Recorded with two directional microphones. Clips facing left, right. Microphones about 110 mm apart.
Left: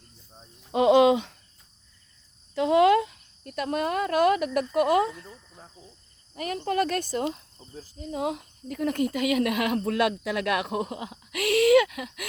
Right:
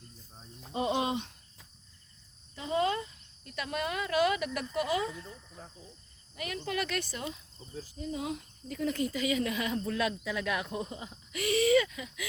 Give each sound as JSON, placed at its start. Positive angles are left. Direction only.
{"t": 0.7, "sound": "a sound", "side_deg": 90}
{"t": 2.6, "sound": "cricket", "side_deg": 80}
{"t": 3.5, "sound": "speech", "side_deg": 45}
{"t": 5.1, "sound": "speech", "side_deg": 5}
{"t": 6.3, "sound": "speech", "side_deg": 40}